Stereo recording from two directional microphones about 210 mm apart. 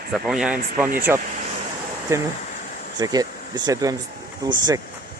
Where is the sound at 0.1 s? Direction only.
Centre (ahead or behind).